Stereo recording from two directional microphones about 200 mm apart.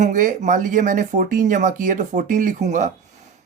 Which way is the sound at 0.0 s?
40° right (ahead or behind).